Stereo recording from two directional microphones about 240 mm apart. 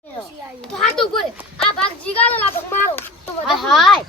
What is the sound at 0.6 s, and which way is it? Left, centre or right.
A child's voice, centre.